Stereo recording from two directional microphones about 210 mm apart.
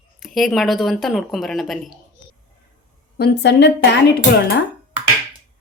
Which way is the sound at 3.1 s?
55° left (ahead or behind).